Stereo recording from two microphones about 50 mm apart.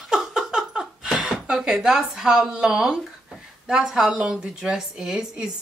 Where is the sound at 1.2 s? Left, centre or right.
Centre.